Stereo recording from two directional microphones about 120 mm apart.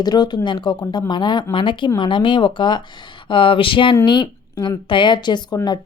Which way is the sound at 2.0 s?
45° left (ahead or behind).